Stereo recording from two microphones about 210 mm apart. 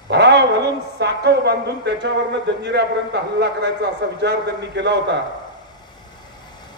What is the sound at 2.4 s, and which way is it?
A man's voice, 55° right (ahead or behind).